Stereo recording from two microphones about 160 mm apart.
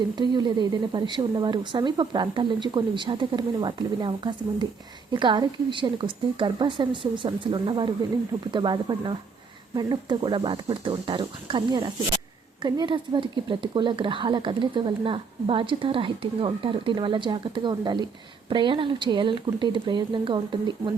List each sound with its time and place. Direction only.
0.2 s a woman's voice: 25° right (ahead or behind)